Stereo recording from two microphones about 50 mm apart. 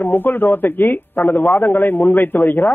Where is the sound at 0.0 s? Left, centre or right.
Left.